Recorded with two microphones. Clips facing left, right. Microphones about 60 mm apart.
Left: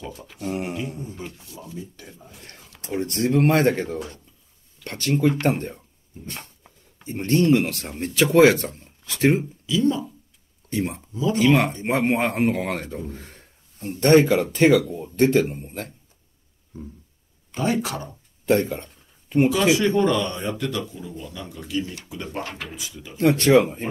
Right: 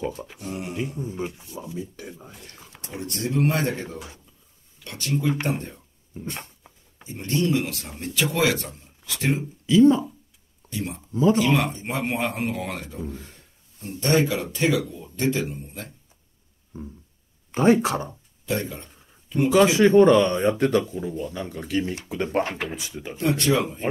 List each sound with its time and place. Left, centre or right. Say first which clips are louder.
0.0 s speech: right 6 dB; right
0.4 s speech: left 4 dB; left
1.1 s speech: right 5 dB; right
2.8 s speech: left 6 dB; left
6.2 s speech: right 2 dB; right
7.1 s speech: left 5 dB; left
9.7 s speech: right 6 dB; right
10.7 s speech: left 4 dB; left
16.7 s speech: right 1 dB; right
18.4 s a sound: left 7 dB; left
19.5 s speech: right 4 dB; right
23.1 s speech: left 5 dB; left